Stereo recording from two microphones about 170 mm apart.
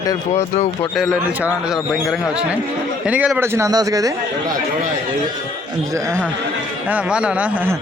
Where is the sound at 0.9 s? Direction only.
Centre (ahead or behind); by 4.1 s 20° right (ahead or behind).